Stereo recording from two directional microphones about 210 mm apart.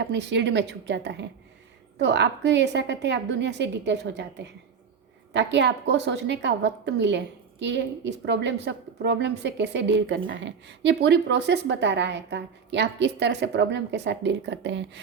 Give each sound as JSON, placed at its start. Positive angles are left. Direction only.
{"t": 0.0, "sound": "a woman's voice", "side_deg": -55}